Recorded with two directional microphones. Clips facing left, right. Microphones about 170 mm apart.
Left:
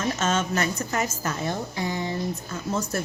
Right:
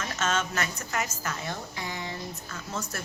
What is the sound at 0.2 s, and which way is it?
A woman's voice, 40° left (ahead or behind).